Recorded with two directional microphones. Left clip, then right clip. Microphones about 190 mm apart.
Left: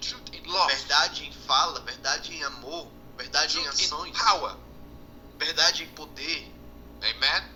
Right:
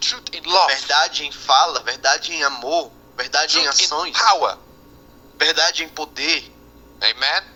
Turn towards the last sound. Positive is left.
turn(degrees=-50)  # may be behind; listen again after turning